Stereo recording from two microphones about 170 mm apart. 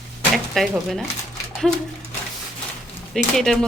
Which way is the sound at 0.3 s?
Centre (ahead or behind).